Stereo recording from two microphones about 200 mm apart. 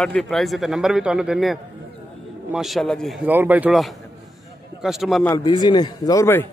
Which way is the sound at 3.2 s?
10° right (ahead or behind).